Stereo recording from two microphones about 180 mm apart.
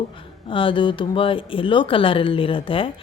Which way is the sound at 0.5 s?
30° left (ahead or behind).